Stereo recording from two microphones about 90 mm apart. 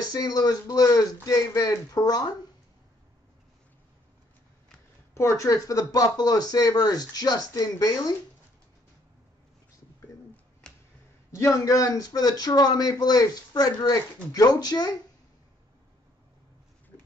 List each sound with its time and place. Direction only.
0.0 s speech: 45° left (ahead or behind)
5.1 s speech: 35° left (ahead or behind)
10.6 s a sound: 10° left (ahead or behind)
11.3 s speech: 35° left (ahead or behind)